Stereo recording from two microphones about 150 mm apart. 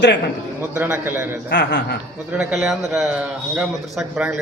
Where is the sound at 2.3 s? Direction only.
5° right (ahead or behind).